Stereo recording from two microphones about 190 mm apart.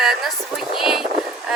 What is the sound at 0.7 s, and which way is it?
Speech, centre (ahead or behind).